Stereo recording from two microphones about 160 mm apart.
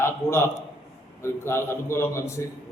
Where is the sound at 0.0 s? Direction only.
15° left (ahead or behind).